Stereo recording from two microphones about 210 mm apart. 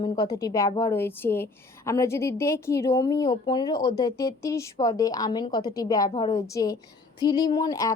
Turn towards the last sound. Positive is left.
turn(degrees=15)  # may be behind; listen again after turning